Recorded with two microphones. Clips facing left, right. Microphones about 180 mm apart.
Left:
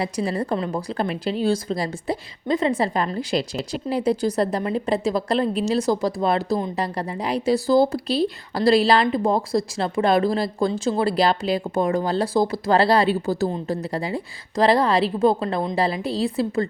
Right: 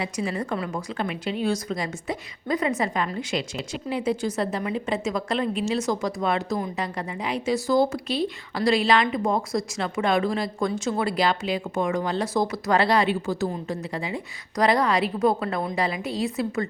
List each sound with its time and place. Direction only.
0.0 s a woman's voice: 35° left (ahead or behind)